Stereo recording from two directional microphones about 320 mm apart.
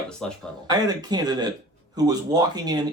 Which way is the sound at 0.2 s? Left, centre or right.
Centre.